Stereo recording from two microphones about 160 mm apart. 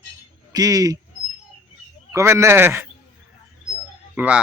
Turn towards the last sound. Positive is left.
turn(degrees=-10)  # may be behind; listen again after turning